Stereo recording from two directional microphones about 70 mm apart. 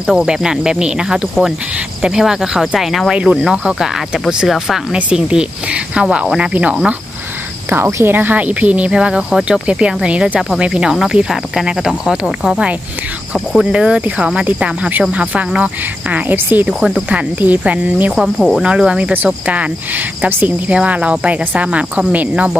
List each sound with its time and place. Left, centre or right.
0.0 s speech: centre
7.7 s speech: right
16.6 s speech: centre
17.1 s speech: right
18.1 s speech: centre